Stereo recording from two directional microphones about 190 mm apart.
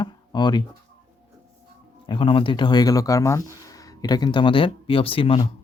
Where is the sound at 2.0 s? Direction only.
25° left (ahead or behind).